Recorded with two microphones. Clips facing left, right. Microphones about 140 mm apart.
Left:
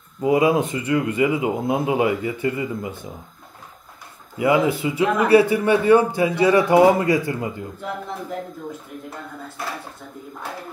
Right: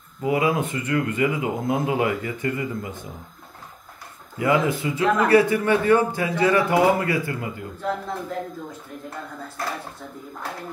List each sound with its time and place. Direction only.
0.2 s speech: 20° left (ahead or behind)
4.4 s speech: 15° left (ahead or behind)